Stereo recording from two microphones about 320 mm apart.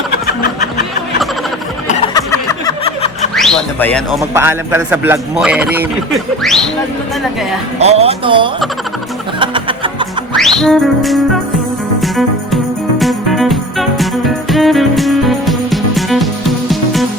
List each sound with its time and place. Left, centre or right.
1.9 s snicker: centre
3.3 s a sound: centre
4.2 s a man's voice: centre
7.8 s speech: centre
9.4 s music: centre
10.3 s music: centre